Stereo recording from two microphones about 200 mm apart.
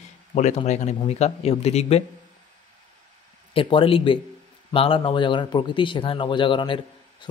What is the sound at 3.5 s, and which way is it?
A man's voice, 25° left (ahead or behind).